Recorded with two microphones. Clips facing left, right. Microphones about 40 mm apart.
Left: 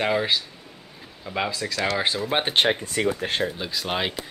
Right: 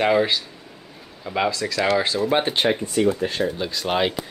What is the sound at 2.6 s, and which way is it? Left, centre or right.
Speech, left.